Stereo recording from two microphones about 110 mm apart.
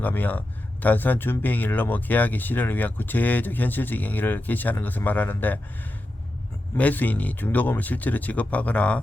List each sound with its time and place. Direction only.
0.0 s speech: 15° left (ahead or behind)
6.7 s speech: 15° left (ahead or behind)